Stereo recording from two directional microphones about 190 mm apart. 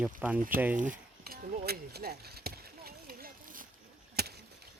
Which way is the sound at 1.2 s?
55° right (ahead or behind).